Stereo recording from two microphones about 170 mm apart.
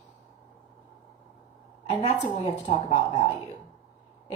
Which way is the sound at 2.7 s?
35° left (ahead or behind).